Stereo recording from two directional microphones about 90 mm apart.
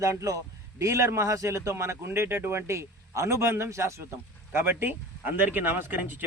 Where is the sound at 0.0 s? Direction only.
35° right (ahead or behind).